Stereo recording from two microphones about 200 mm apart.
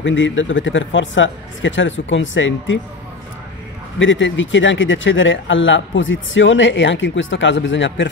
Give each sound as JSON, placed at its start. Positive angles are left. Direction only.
{"t": 0.0, "sound": "speech", "side_deg": 70}
{"t": 4.0, "sound": "speech", "side_deg": 70}